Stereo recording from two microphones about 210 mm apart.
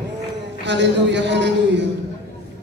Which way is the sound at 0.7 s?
55° right (ahead or behind).